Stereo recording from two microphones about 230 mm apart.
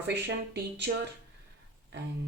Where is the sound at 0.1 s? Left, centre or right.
Right.